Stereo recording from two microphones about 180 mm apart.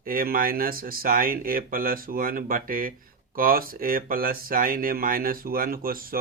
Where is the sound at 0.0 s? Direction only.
50° right (ahead or behind).